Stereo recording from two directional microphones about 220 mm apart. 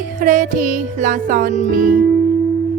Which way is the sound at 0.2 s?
35° right (ahead or behind).